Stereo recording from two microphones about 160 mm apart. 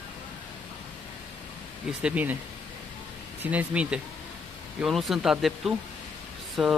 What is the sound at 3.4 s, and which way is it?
Speech, 10° right (ahead or behind).